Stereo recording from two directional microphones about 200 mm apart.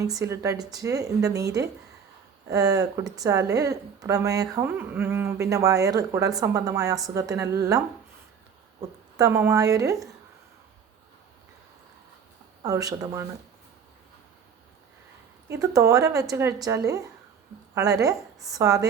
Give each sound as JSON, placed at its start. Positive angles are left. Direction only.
{"t": 0.0, "sound": "speech", "side_deg": -15}
{"t": 8.8, "sound": "speech", "side_deg": -15}
{"t": 12.6, "sound": "speech", "side_deg": -15}
{"t": 15.4, "sound": "speech", "side_deg": -15}